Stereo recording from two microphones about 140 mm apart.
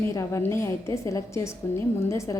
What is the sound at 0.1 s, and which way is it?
A woman's voice, 20° left (ahead or behind).